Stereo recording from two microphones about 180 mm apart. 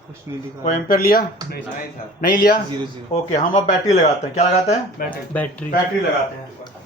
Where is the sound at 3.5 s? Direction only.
45° left (ahead or behind).